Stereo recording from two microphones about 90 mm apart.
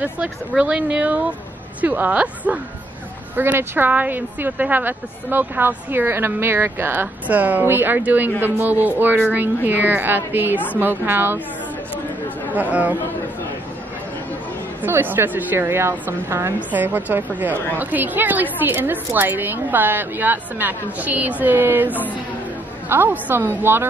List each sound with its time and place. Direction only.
0.0 s a woman's voice: 15° right (ahead or behind)
12.5 s speech: 15° right (ahead or behind)
14.8 s a woman's voice: 20° right (ahead or behind)
16.5 s a woman's voice: 20° right (ahead or behind)
21.8 s speech: 20° left (ahead or behind)
22.8 s a woman's voice: 20° right (ahead or behind)